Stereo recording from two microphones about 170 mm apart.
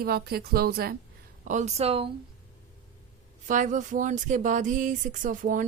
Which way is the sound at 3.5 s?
45° right (ahead or behind).